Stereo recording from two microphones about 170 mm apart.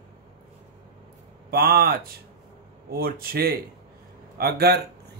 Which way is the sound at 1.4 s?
65° right (ahead or behind).